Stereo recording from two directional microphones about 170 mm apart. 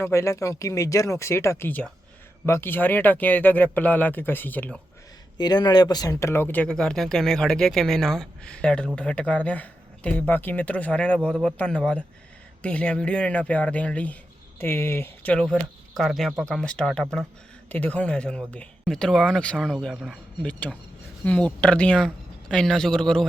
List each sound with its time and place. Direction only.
0.0 s speech: 15° left (ahead or behind)
5.4 s speech: 25° left (ahead or behind); by 23.2 s 5° left (ahead or behind)